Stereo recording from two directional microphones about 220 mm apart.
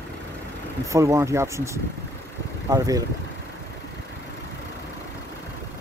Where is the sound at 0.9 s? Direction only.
15° right (ahead or behind).